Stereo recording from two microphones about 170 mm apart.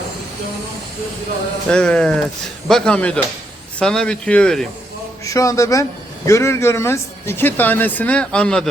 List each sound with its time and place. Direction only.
1.7 s speech: 5° left (ahead or behind)
5.2 s a man's voice: 20° left (ahead or behind)